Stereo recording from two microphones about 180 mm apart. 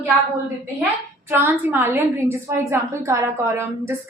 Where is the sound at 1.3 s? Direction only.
10° right (ahead or behind).